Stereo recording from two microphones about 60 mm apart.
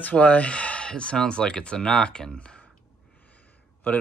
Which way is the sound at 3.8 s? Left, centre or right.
Left.